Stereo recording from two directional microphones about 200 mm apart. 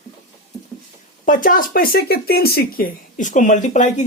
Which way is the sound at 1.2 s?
40° left (ahead or behind).